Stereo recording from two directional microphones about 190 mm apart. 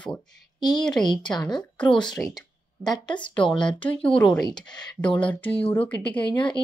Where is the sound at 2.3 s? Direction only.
20° left (ahead or behind).